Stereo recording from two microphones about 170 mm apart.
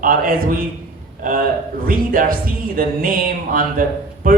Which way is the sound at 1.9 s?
55° right (ahead or behind).